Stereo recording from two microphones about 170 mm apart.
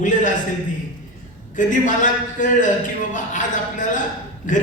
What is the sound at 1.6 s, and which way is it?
Speech, 50° left (ahead or behind).